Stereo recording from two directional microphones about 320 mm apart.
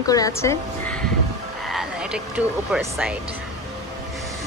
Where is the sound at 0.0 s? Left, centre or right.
Centre.